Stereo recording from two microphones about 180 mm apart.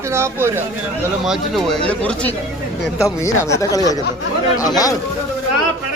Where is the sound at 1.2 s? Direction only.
Centre (ahead or behind); by 3.9 s 20° left (ahead or behind).